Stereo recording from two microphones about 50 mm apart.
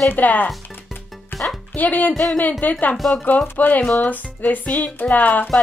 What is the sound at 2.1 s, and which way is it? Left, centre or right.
Speech, centre.